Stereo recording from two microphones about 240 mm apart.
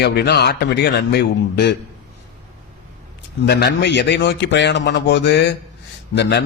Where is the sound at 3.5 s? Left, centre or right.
Left.